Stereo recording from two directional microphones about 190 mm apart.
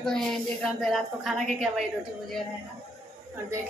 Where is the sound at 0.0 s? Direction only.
Centre (ahead or behind).